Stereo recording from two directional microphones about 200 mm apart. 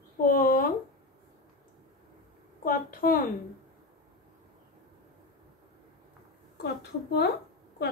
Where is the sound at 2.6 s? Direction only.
45° left (ahead or behind).